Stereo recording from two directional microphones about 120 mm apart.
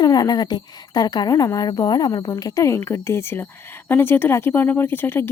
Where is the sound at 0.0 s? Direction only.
35° left (ahead or behind).